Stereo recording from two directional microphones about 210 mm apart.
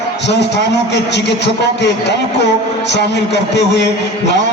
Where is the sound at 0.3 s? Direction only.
55° left (ahead or behind).